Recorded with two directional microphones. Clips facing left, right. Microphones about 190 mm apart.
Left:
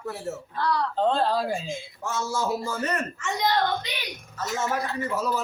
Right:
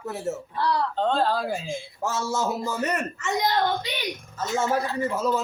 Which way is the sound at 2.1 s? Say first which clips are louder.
Even; 20° right (ahead or behind).